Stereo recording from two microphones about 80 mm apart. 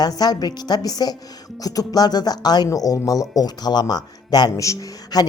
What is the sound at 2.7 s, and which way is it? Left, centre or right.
Speech, left.